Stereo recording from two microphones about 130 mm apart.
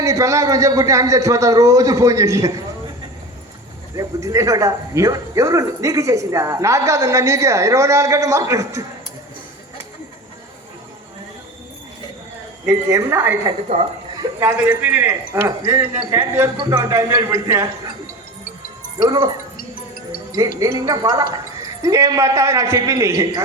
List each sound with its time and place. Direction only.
0.0 s a man's voice: 25° right (ahead or behind)
3.9 s a man's voice: 25° right (ahead or behind)
12.6 s a man's voice: 25° right (ahead or behind)
13.7 s speech: 55° right (ahead or behind)
14.2 s speech: 25° right (ahead or behind)
14.6 s a man's voice: 10° right (ahead or behind)
18.9 s speech: 35° right (ahead or behind)
20.6 s a man's voice: 25° right (ahead or behind)